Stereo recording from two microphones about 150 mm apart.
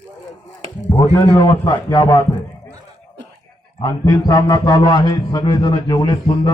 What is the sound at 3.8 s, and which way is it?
A man's voice, 25° left (ahead or behind).